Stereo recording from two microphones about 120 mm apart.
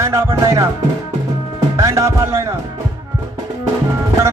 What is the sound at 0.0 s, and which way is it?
Speech, 25° right (ahead or behind).